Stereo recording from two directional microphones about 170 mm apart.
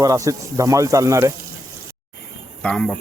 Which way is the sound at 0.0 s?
20° right (ahead or behind).